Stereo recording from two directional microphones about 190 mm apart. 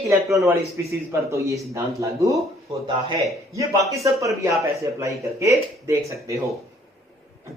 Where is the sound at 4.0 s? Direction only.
15° right (ahead or behind).